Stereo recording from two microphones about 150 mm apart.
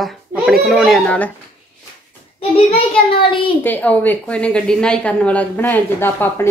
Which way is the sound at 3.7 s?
10° left (ahead or behind).